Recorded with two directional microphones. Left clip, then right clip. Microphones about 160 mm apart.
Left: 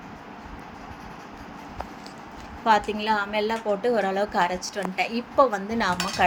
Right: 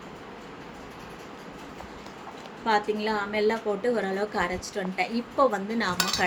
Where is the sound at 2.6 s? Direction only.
20° left (ahead or behind).